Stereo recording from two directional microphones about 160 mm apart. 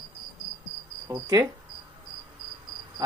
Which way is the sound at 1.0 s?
20° right (ahead or behind).